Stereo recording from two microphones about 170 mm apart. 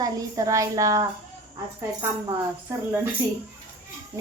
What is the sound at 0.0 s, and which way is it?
A woman's voice, 20° right (ahead or behind).